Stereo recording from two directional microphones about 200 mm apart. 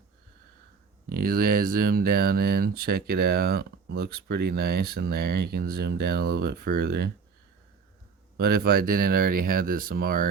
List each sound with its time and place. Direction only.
1.1 s speech: 45° right (ahead or behind)
8.4 s speech: 50° right (ahead or behind)